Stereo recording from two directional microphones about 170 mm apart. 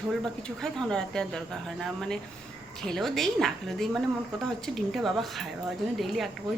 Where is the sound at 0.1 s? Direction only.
5° left (ahead or behind).